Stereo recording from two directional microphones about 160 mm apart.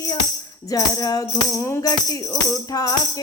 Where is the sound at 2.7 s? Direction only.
25° left (ahead or behind).